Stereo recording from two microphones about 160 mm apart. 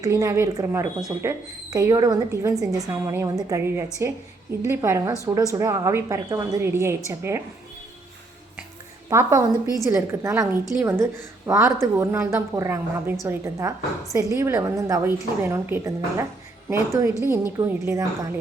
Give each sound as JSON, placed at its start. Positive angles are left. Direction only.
{"t": 0.0, "sound": "a woman's voice", "side_deg": -20}
{"t": 9.0, "sound": "a woman's voice", "side_deg": -20}